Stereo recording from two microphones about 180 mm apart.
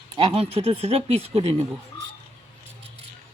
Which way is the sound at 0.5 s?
35° right (ahead or behind).